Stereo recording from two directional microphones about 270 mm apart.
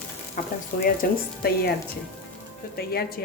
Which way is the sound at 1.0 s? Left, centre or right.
Left.